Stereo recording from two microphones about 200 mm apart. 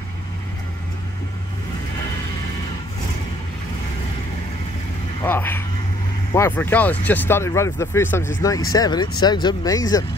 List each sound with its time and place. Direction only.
5.2 s speech: 10° left (ahead or behind)